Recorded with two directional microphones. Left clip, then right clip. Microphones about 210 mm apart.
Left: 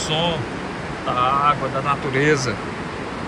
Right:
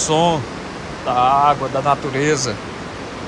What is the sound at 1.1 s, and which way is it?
Speech, 25° right (ahead or behind).